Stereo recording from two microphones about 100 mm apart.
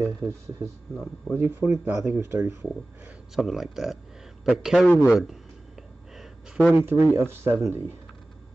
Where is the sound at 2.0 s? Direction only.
25° right (ahead or behind).